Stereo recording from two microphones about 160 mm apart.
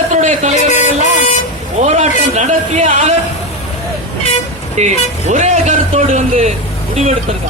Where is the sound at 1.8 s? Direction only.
45° right (ahead or behind).